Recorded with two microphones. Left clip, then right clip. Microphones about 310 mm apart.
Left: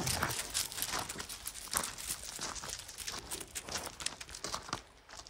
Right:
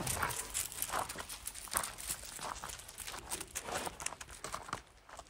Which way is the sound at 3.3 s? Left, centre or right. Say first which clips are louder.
Right 1 dB; centre.